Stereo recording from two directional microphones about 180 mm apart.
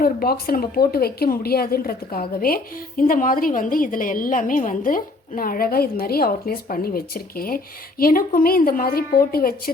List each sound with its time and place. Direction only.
0.0 s a woman's voice: 55° left (ahead or behind)